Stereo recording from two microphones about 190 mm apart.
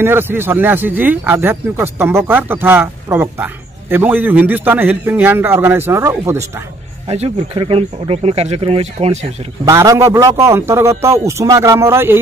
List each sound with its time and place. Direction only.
0.0 s speech: 10° right (ahead or behind)
7.1 s speech: 35° right (ahead or behind)
9.7 s speech: 15° right (ahead or behind)